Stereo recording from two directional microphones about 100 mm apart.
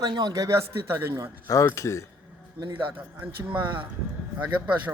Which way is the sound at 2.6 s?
55° right (ahead or behind).